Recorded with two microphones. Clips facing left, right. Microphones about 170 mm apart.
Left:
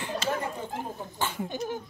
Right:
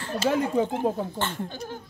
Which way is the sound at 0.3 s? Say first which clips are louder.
Right 11 dB; 80° right.